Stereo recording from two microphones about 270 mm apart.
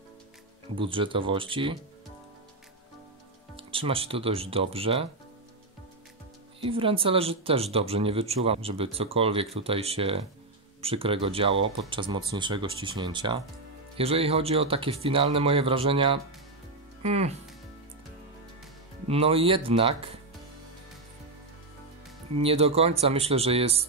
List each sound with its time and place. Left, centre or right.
0.7 s speech: centre
3.5 s speech: centre
6.6 s speech: centre
19.0 s speech: right
22.4 s speech: right